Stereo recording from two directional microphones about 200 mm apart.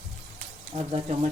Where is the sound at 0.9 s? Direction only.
30° right (ahead or behind).